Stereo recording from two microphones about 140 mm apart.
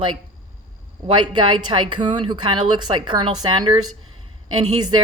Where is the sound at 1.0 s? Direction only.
35° right (ahead or behind).